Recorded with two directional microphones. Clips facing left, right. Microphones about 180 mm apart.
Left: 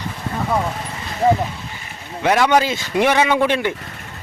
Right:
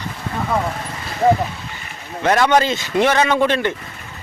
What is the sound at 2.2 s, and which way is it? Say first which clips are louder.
Speech: even; 10° left (ahead or behind).